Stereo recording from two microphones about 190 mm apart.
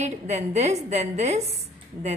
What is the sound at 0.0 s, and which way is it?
A woman's voice, 35° right (ahead or behind).